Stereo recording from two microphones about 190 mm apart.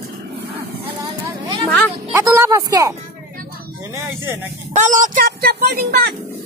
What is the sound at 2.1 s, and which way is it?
Speech, 15° right (ahead or behind).